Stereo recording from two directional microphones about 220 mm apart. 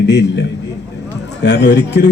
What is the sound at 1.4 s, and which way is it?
Speech, 50° left (ahead or behind).